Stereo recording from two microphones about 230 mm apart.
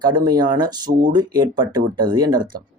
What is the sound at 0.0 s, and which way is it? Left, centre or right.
Speech, centre.